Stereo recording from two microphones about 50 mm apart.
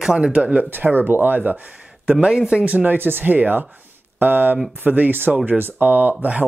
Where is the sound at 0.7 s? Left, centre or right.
Right.